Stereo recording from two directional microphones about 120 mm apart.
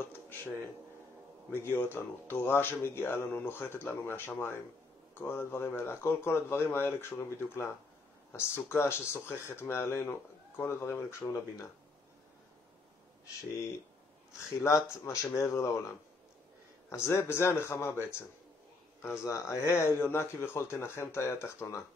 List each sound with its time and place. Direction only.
1.5 s speech: 20° left (ahead or behind)
14.6 s speech: 25° left (ahead or behind)
16.9 s speech: 20° left (ahead or behind)